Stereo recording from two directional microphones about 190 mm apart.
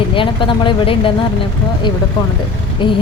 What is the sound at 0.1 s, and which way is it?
A woman's voice, 25° left (ahead or behind).